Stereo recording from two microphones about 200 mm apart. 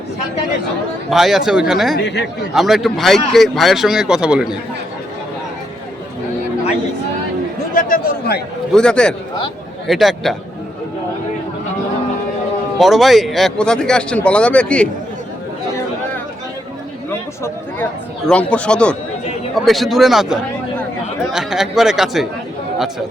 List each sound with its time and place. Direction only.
1.1 s speech: centre (ahead or behind)
2.0 s speech: 55° left (ahead or behind)
2.6 s speech: centre (ahead or behind)
7.7 s a man's voice: 40° left (ahead or behind)
8.7 s speech: 5° left (ahead or behind)
12.8 s speech: centre (ahead or behind)
17.1 s a sound: 10° left (ahead or behind)
18.3 s speech: 5° left (ahead or behind)